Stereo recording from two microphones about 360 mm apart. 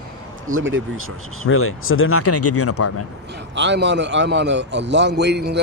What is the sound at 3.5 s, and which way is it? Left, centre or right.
A man's voice, right.